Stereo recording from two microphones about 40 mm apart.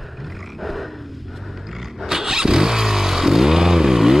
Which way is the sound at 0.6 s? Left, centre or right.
Centre.